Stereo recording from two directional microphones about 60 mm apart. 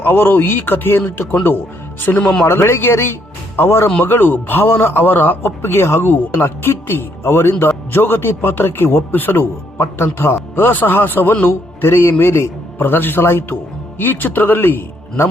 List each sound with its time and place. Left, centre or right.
0.0 s a man's voice: left